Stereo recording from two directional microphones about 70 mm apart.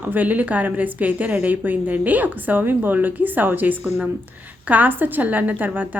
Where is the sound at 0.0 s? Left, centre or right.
Right.